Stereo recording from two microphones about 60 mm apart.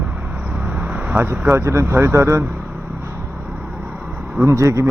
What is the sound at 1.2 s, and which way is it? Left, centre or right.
Speech, right.